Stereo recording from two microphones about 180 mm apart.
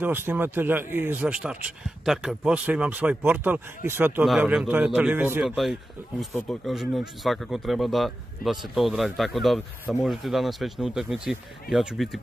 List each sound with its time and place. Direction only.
0.0 s a man's voice: 10° right (ahead or behind)